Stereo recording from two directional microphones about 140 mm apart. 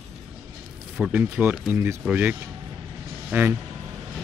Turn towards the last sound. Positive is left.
turn(degrees=-15)  # may be behind; listen again after turning